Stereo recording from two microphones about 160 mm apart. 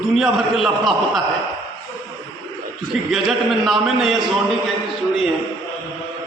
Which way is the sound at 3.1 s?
Centre (ahead or behind).